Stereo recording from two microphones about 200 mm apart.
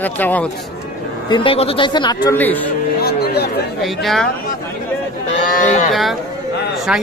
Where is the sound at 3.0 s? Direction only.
55° left (ahead or behind).